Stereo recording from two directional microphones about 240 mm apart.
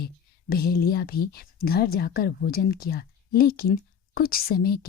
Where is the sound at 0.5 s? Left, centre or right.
Left.